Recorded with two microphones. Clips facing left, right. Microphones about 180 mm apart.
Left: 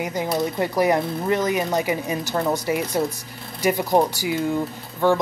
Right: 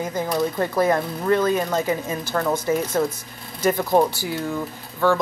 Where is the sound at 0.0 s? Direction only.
15° left (ahead or behind).